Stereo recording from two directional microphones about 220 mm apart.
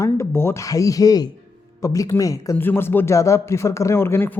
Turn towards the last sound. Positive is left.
turn(degrees=10)  # may be behind; listen again after turning